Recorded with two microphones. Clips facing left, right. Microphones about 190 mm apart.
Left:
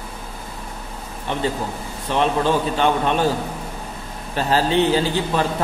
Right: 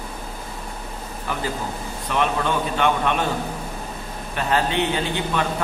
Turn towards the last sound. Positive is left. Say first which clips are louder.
# left 4 dB
turn(degrees=35)  # may be behind; listen again after turning